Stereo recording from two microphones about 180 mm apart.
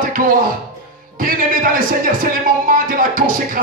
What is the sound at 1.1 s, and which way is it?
Speech, 50° right (ahead or behind).